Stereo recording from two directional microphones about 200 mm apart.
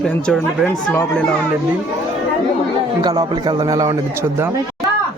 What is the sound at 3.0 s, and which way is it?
A man's voice, 20° right (ahead or behind).